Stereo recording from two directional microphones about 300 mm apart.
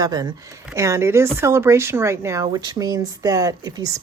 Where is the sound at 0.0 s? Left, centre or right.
Centre.